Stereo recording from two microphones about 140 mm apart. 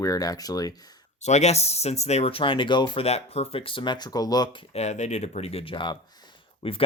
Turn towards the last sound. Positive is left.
turn(degrees=40)  # may be behind; listen again after turning